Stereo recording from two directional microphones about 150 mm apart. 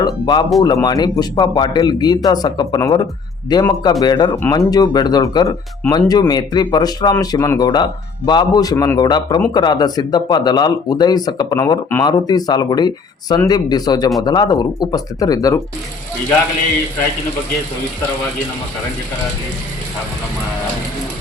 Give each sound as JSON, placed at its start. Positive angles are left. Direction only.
{"t": 0.0, "sound": "speech", "side_deg": 30}